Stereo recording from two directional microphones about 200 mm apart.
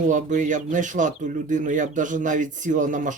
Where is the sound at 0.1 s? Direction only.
40° right (ahead or behind).